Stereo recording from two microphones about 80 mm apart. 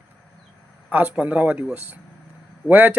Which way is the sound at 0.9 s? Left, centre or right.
Centre.